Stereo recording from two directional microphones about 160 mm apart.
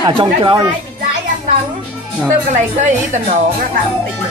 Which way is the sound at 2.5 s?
50° right (ahead or behind).